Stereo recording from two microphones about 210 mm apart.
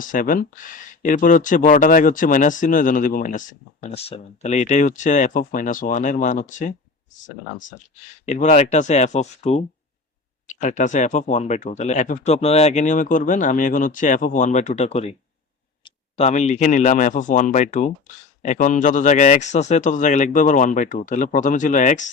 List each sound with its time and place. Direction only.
0.0 s speech: 40° left (ahead or behind)